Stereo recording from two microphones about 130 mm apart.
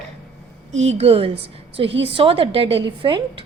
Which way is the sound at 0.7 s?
55° right (ahead or behind).